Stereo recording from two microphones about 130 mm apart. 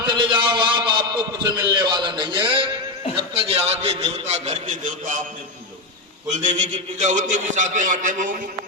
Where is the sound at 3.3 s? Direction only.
45° right (ahead or behind); by 5.2 s 70° right (ahead or behind).